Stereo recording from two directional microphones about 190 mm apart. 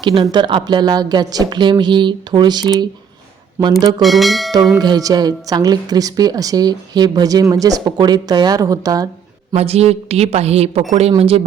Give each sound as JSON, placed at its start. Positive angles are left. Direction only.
{"t": 0.0, "sound": "speech", "side_deg": -25}
{"t": 4.0, "sound": "speech", "side_deg": 0}
{"t": 4.8, "sound": "speech", "side_deg": -20}
{"t": 9.5, "sound": "a woman's voice", "side_deg": -30}